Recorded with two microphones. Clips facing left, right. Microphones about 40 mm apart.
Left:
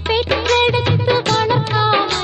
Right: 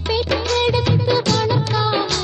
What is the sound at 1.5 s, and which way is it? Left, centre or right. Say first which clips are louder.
Music: left 3 dB; centre.